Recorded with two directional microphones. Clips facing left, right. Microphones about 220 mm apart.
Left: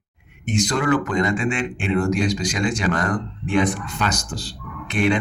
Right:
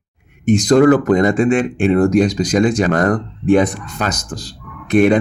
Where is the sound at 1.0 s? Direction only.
55° right (ahead or behind).